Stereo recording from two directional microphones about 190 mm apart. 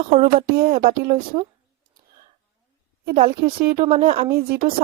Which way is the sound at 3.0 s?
50° right (ahead or behind).